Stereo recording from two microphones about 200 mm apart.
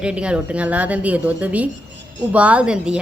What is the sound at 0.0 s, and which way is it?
A woman's voice, 5° right (ahead or behind).